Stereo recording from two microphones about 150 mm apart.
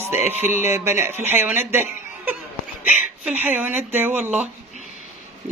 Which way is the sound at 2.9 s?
10° right (ahead or behind).